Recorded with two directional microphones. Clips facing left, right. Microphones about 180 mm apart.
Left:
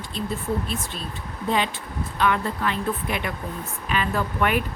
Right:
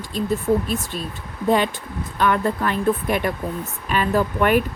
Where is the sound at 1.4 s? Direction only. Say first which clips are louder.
Right 6 dB; 50° right (ahead or behind).